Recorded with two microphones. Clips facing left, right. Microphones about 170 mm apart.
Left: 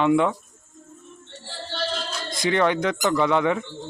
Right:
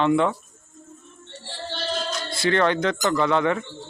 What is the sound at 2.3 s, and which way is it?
Speech, 15° left (ahead or behind).